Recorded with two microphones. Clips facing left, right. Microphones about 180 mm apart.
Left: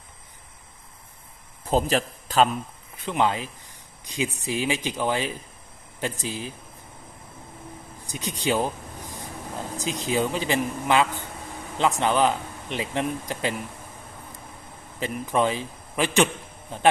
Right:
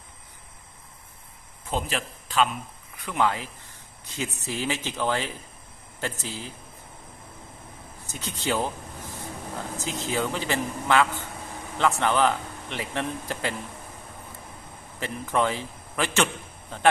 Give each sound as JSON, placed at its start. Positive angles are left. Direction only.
{"t": 1.6, "sound": "a man's voice", "side_deg": 40}
{"t": 3.0, "sound": "speech", "side_deg": 20}
{"t": 8.0, "sound": "a sound", "side_deg": 15}
{"t": 9.7, "sound": "speech", "side_deg": 15}
{"t": 14.9, "sound": "a man's voice", "side_deg": 15}